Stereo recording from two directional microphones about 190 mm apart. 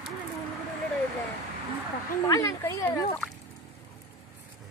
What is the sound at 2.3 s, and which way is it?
Speech, 15° left (ahead or behind).